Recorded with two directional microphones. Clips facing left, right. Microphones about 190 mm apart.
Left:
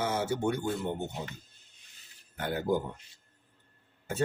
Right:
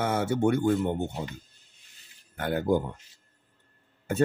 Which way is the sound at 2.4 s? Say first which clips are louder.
Right 4 dB; 55° right (ahead or behind).